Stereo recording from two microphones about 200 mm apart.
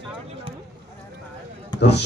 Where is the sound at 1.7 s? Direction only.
60° left (ahead or behind).